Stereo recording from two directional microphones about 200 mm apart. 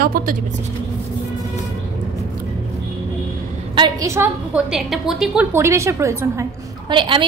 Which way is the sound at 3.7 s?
20° right (ahead or behind).